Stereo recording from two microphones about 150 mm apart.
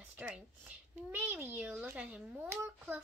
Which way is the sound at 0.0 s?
10° right (ahead or behind).